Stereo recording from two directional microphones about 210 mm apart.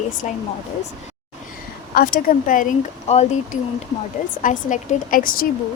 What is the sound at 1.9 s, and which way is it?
A woman's voice, 45° left (ahead or behind).